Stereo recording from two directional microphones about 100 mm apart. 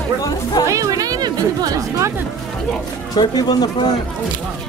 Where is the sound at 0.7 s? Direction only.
35° right (ahead or behind).